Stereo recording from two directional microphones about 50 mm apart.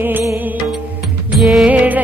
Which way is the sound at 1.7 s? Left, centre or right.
Right.